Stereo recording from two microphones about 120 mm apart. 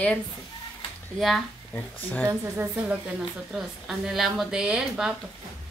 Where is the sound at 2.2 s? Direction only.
15° right (ahead or behind).